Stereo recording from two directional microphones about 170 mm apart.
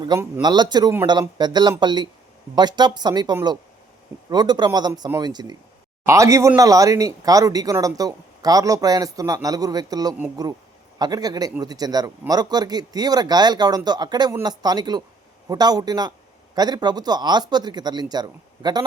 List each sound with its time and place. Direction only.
0.0 s speech: 25° right (ahead or behind)
10.2 s speech: 10° right (ahead or behind)
10.9 s speech: 25° right (ahead or behind)